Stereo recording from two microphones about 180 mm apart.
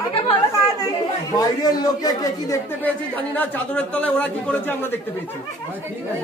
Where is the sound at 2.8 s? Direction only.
10° left (ahead or behind).